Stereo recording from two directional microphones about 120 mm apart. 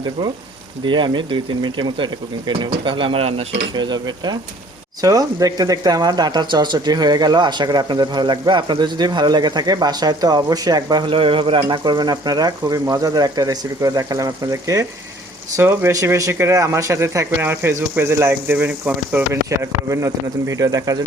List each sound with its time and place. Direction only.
0.9 s speech: 40° right (ahead or behind)
3.8 s speech: 40° right (ahead or behind)
11.1 s speech: 45° right (ahead or behind); by 21.0 s 30° right (ahead or behind)